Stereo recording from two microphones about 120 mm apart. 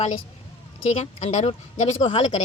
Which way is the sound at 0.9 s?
65° left (ahead or behind).